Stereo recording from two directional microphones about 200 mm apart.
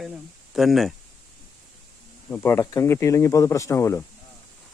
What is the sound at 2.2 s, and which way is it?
Speech, 10° left (ahead or behind).